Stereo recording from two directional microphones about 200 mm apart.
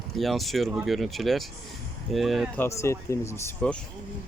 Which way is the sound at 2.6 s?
15° left (ahead or behind).